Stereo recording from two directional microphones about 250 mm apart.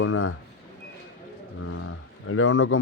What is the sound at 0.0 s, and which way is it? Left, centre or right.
Speech, left.